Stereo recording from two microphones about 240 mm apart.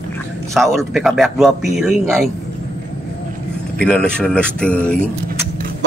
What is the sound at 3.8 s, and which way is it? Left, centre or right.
Speech, centre.